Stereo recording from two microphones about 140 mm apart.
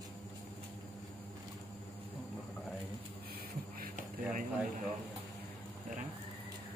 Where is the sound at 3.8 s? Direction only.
70° right (ahead or behind).